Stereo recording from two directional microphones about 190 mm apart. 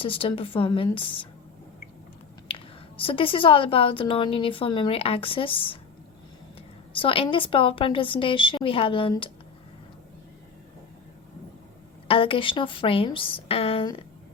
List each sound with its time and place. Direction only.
0.0 s a woman's voice: 30° left (ahead or behind)
2.5 s a sound: 30° left (ahead or behind)
3.0 s a woman's voice: 30° left (ahead or behind)
6.9 s a woman's voice: 30° left (ahead or behind)
12.0 s a woman's voice: 30° left (ahead or behind)